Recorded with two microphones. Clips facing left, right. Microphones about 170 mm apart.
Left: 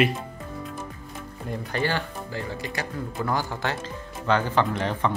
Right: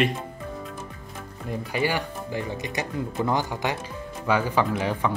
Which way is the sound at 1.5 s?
10° right (ahead or behind).